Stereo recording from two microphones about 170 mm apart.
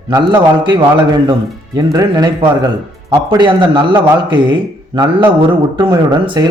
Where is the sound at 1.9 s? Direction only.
20° right (ahead or behind).